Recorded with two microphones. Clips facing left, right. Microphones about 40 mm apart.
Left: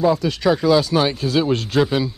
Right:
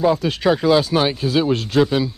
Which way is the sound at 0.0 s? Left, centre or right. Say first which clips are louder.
Even; right.